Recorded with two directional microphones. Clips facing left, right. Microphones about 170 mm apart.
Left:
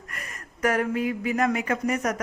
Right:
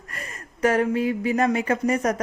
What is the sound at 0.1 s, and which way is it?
A woman's voice, 30° right (ahead or behind).